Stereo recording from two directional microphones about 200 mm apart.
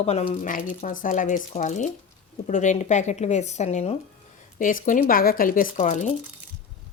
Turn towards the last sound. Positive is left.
turn(degrees=40)  # may be behind; listen again after turning